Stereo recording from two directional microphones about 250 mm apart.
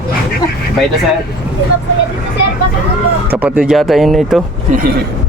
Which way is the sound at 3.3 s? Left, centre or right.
Centre.